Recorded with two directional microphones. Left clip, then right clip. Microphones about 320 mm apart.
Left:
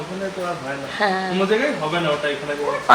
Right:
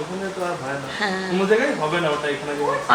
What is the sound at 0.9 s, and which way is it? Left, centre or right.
Speech, centre.